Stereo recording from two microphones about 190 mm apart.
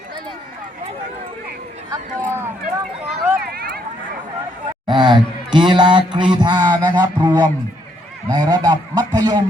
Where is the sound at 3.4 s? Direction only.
50° right (ahead or behind).